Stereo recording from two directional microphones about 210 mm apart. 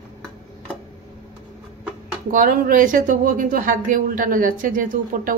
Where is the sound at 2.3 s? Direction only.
40° right (ahead or behind).